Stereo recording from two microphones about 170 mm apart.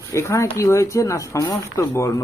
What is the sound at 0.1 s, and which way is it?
Speech, 15° left (ahead or behind).